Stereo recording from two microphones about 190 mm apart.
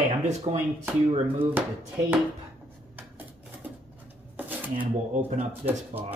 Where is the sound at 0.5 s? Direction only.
35° right (ahead or behind).